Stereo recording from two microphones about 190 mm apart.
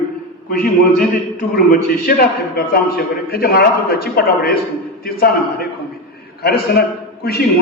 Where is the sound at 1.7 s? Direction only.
50° left (ahead or behind).